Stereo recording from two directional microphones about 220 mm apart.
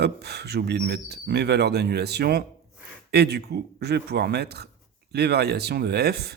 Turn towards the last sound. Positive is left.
turn(degrees=-45)  # may be behind; listen again after turning